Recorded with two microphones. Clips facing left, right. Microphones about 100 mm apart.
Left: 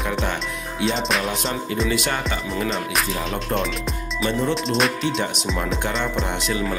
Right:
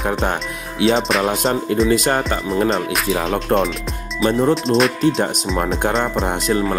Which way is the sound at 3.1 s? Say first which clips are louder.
Right 7 dB; 90° right.